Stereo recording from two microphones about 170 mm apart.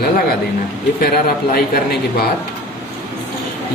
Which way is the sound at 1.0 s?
60° left (ahead or behind).